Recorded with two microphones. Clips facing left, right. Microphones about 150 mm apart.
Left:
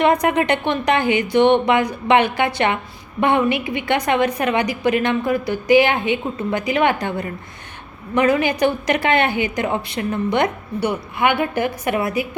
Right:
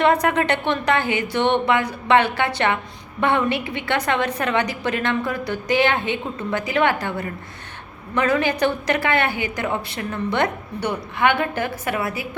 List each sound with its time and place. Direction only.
0.0 s a woman's voice: 15° left (ahead or behind)